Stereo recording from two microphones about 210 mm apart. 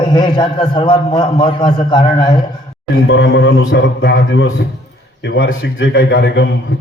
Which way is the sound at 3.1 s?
55° left (ahead or behind).